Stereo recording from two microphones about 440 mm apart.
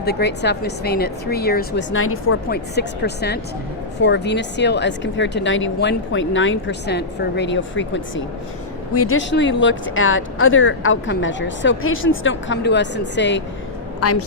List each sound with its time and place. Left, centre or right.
0.0 s a woman's voice: left